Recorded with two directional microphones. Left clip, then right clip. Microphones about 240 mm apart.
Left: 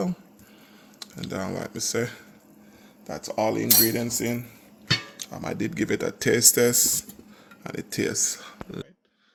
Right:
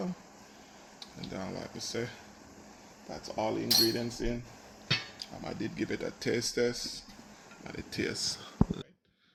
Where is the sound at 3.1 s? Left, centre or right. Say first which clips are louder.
Left 8 dB; left.